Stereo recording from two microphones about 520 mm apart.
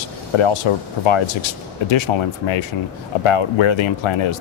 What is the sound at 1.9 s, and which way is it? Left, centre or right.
Speech, left.